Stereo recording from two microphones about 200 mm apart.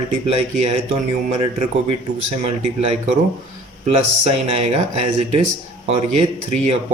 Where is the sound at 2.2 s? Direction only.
35° right (ahead or behind).